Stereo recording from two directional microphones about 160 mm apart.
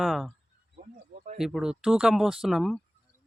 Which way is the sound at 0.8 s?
70° right (ahead or behind).